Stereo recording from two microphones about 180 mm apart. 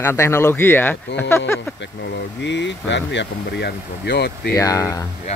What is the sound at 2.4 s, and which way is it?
Speech, 80° left.